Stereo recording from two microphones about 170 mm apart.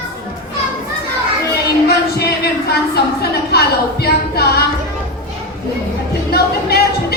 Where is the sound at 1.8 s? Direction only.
70° left (ahead or behind).